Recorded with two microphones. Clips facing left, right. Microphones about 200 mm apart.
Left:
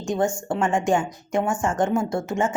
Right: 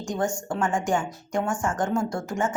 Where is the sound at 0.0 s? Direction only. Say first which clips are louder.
Left 4 dB; 25° left (ahead or behind).